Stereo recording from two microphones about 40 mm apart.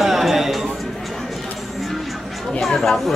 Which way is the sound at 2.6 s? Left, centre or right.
Centre.